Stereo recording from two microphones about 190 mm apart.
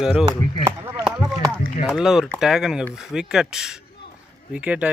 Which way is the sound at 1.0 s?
Centre (ahead or behind).